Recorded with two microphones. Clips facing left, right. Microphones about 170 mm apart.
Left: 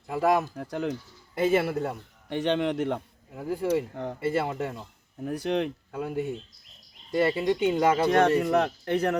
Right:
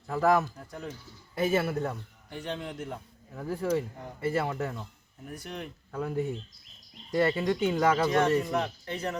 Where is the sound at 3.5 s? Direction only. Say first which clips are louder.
Left 3 dB; 15° left (ahead or behind).